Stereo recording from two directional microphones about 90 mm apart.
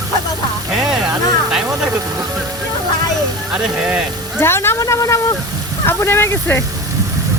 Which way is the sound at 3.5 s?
15° right (ahead or behind).